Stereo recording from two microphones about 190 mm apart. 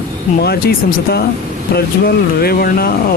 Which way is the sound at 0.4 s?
55° left (ahead or behind).